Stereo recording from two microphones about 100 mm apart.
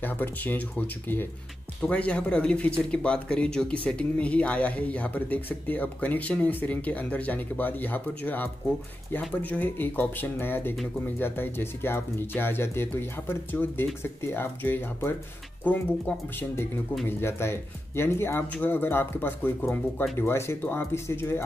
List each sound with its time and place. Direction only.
0.0 s speech: 20° left (ahead or behind)